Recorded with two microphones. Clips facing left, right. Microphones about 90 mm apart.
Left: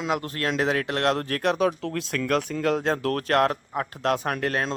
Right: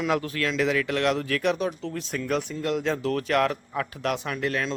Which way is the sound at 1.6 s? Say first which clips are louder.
Left 5 dB; 75° left (ahead or behind).